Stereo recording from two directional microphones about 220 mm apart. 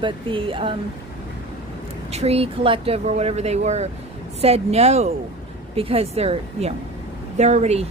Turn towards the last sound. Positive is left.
turn(degrees=-30)  # may be behind; listen again after turning